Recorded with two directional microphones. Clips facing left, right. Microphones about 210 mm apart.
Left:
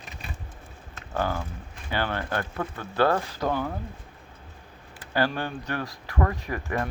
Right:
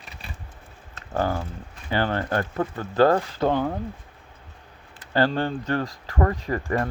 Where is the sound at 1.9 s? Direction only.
45° right (ahead or behind).